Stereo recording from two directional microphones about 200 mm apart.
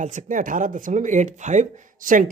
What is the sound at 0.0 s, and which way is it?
Speech, 35° right (ahead or behind).